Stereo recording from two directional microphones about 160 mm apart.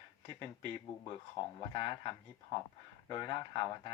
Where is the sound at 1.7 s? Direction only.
30° left (ahead or behind).